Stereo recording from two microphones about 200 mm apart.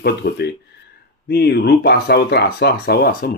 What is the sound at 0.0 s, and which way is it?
Speech, 55° left (ahead or behind).